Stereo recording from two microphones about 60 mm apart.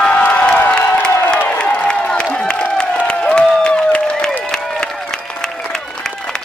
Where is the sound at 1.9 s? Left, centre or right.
Centre.